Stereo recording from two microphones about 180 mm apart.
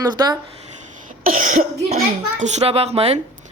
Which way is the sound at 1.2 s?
50° right (ahead or behind).